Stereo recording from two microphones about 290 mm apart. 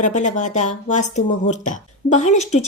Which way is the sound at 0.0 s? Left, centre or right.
Left.